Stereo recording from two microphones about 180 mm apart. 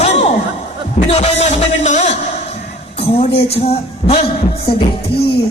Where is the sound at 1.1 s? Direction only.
35° left (ahead or behind).